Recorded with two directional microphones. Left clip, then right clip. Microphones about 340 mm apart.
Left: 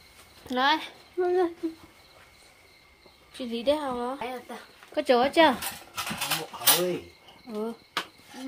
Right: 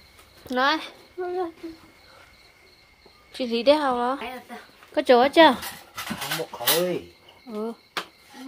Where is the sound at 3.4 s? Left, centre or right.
Centre.